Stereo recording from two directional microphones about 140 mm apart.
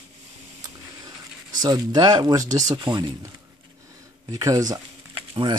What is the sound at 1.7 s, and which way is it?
Speech, 30° right (ahead or behind).